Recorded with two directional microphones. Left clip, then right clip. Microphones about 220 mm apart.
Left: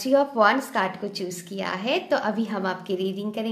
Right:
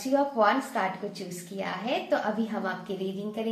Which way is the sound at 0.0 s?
50° left (ahead or behind).